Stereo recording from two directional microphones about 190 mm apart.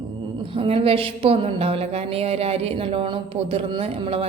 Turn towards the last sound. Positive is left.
turn(degrees=-30)  # may be behind; listen again after turning